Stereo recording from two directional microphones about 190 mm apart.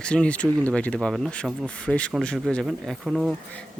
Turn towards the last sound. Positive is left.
turn(degrees=0)  # may be behind; listen again after turning